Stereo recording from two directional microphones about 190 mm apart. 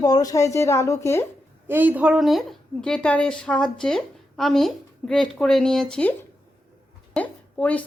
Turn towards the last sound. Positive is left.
turn(degrees=10)  # may be behind; listen again after turning